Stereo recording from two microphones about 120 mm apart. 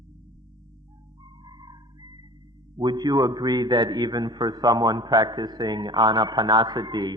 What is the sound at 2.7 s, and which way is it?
A man's voice, 35° right (ahead or behind).